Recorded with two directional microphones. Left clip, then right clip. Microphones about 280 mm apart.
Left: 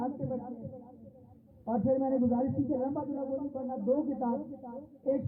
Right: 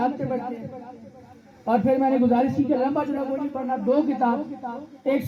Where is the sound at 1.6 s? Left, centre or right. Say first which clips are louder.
Right 9 dB; right.